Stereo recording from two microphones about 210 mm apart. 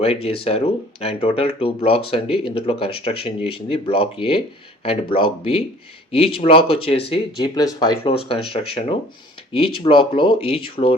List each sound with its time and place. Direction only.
0.0 s speech: 30° left (ahead or behind)